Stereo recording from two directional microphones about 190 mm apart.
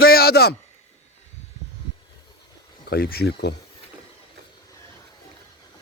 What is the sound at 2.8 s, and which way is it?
Speech, 55° left (ahead or behind).